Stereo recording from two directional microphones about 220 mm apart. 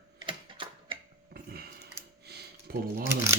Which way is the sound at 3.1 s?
10° right (ahead or behind).